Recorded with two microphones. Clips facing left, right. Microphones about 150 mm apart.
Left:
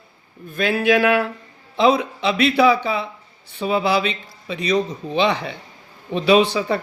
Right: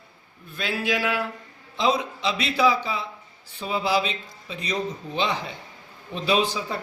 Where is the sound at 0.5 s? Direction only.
55° left (ahead or behind).